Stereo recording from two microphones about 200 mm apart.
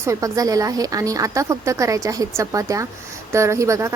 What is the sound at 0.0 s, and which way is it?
Speech, 15° right (ahead or behind).